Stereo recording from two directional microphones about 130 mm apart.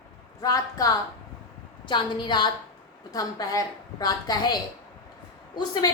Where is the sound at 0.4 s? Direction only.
25° left (ahead or behind).